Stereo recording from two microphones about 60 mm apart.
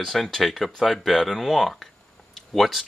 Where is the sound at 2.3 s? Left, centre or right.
Centre.